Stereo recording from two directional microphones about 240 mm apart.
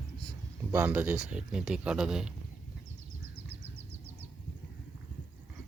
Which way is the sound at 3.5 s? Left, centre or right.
Right.